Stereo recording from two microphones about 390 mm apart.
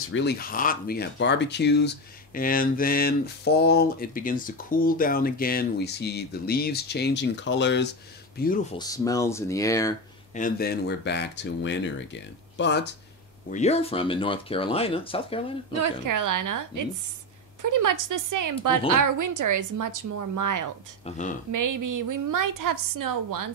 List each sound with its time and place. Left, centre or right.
0.1 s speech: left
8.7 s speech: centre
10.3 s speech: left
13.5 s speech: centre
15.7 s speech: right
21.0 s speech: centre
21.5 s speech: right